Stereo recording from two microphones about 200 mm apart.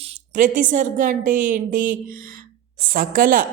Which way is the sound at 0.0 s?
35° right (ahead or behind).